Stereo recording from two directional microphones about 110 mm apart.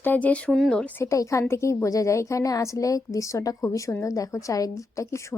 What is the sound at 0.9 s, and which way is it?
A woman's voice, 30° left (ahead or behind).